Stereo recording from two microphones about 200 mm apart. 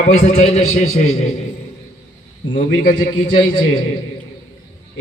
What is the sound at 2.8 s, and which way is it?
Music, 50° left (ahead or behind).